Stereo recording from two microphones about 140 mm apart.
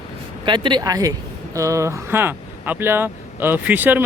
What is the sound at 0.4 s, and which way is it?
Speech, 35° right (ahead or behind).